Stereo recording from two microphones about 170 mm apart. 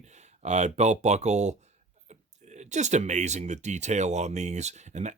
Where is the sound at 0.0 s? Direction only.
45° right (ahead or behind).